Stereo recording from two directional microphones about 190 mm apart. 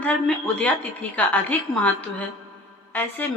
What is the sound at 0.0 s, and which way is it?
A woman's voice, 5° left (ahead or behind).